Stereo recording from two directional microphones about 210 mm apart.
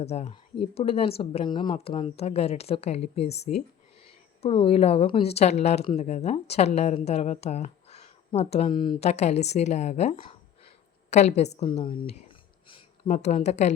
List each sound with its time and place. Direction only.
0.0 s a woman's voice: 30° left (ahead or behind)